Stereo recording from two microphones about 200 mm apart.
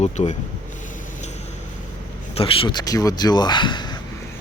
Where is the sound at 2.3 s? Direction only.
25° left (ahead or behind).